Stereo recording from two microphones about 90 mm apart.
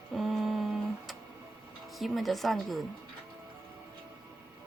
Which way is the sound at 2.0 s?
Centre (ahead or behind).